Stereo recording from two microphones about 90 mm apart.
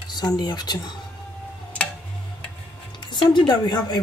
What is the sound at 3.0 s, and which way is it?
Speech, 55° left (ahead or behind).